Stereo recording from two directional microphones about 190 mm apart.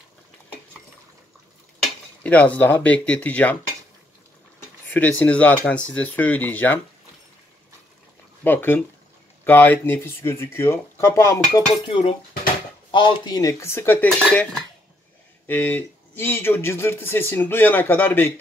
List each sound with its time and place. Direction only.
2.2 s speech: 5° left (ahead or behind)
4.8 s speech: 10° left (ahead or behind)
8.5 s speech: 10° left (ahead or behind)